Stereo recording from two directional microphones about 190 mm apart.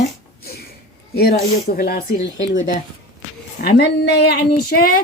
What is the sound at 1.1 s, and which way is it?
Speech, 55° left (ahead or behind).